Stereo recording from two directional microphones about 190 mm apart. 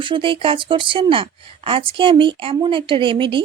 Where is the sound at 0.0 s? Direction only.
25° right (ahead or behind).